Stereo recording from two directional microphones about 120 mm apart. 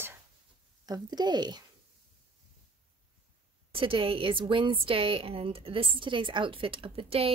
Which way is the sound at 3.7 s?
50° right (ahead or behind).